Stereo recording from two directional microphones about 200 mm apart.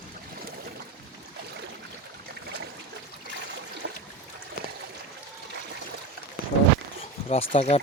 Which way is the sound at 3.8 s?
65° right (ahead or behind).